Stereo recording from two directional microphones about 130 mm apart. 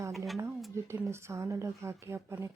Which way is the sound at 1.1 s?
20° right (ahead or behind).